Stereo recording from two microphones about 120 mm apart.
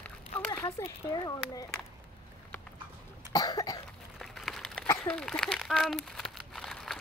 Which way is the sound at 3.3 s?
35° left (ahead or behind).